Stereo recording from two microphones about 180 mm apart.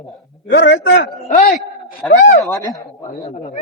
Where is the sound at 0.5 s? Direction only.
80° left.